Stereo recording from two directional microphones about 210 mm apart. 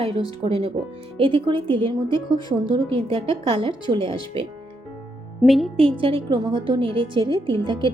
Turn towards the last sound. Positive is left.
turn(degrees=-25)  # may be behind; listen again after turning